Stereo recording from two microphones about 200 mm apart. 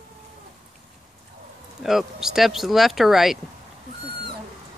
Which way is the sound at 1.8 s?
Centre (ahead or behind).